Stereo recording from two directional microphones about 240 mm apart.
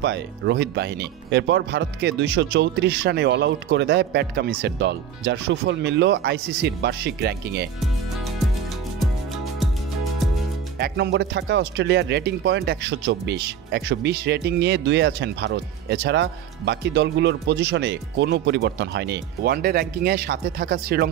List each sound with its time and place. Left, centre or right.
0.0 s speech: right
10.8 s speech: right